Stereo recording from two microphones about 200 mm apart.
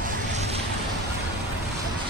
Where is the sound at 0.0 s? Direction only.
35° right (ahead or behind).